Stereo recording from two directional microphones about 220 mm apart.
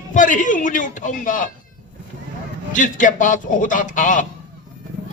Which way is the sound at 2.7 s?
35° left (ahead or behind).